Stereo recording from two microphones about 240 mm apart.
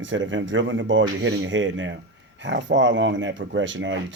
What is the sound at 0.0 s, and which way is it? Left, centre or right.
Speech, right.